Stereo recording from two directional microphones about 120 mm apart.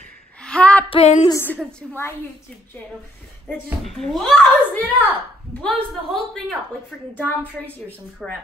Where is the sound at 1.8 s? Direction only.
5° left (ahead or behind).